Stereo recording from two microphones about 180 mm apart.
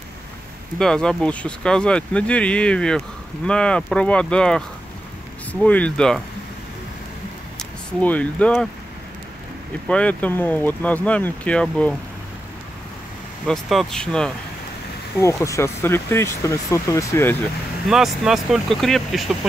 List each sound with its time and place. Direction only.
0.7 s speech: 5° left (ahead or behind)
7.5 s speech: 10° left (ahead or behind)
9.8 s speech: 5° left (ahead or behind)
13.5 s speech: centre (ahead or behind)
15.4 s speech: 15° left (ahead or behind)
17.8 s speech: centre (ahead or behind)